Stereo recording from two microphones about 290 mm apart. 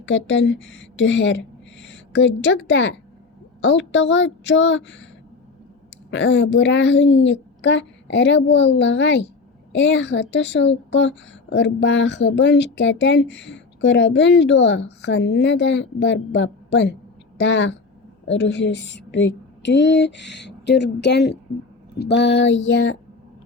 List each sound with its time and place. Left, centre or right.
0.0 s a woman's voice: left
6.1 s a woman's voice: left